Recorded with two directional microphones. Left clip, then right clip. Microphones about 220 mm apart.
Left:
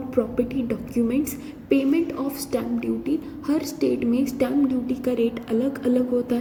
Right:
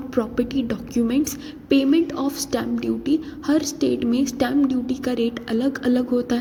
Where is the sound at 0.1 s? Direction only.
45° right (ahead or behind).